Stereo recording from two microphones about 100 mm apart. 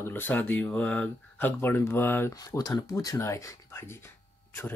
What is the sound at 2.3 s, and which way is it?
Speech, 40° left (ahead or behind).